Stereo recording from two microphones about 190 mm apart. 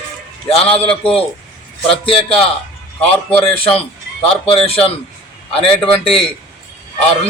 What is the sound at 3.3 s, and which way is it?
Speech, 5° left (ahead or behind).